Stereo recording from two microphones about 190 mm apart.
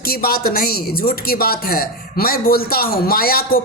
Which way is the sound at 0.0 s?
50° left (ahead or behind).